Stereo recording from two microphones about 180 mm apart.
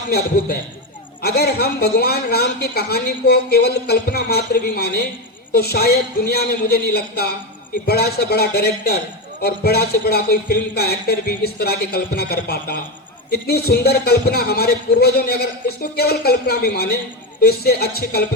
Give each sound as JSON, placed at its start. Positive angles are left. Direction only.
{"t": 0.1, "sound": "a woman's voice", "side_deg": 60}